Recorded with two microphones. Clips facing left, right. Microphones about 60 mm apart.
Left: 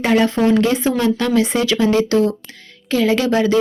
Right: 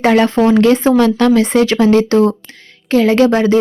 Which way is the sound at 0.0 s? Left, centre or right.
Right.